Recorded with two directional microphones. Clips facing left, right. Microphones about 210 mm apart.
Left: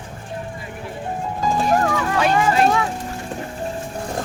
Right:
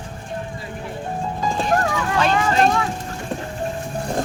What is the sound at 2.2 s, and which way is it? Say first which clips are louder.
Speech: left 1 dB; 10° left (ahead or behind).